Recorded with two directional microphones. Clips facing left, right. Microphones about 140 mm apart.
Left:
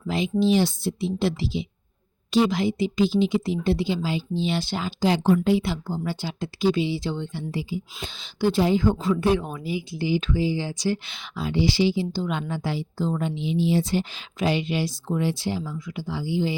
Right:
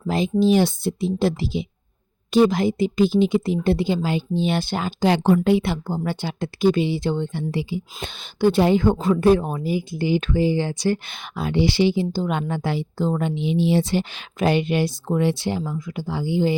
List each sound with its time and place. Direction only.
0.0 s speech: 40° right (ahead or behind)
7.5 s a woman's voice: 70° right (ahead or behind)